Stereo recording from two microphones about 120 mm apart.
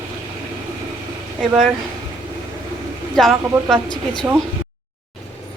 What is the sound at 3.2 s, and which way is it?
Speech, centre (ahead or behind).